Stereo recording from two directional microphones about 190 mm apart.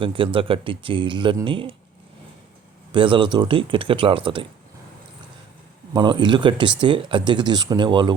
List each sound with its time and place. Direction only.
0.0 s speech: 25° right (ahead or behind)
2.9 s speech: 25° right (ahead or behind)
5.9 s speech: 25° right (ahead or behind)